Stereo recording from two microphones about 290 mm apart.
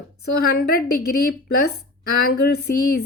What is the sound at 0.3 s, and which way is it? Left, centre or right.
Speech, left.